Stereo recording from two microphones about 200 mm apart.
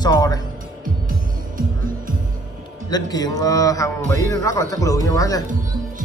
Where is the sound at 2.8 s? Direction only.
20° left (ahead or behind).